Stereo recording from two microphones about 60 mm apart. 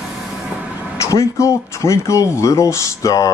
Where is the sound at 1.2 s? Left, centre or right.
Left.